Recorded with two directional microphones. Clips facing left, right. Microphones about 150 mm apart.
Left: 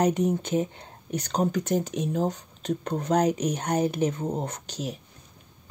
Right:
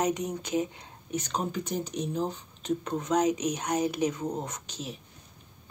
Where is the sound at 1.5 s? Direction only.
90° left.